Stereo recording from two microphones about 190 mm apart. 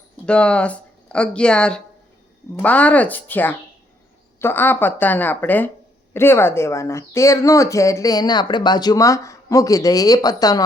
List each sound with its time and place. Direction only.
0.3 s speech: 5° left (ahead or behind)